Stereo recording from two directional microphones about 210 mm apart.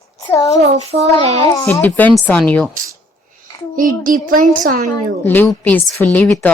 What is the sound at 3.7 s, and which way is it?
A child's voice, 40° right (ahead or behind).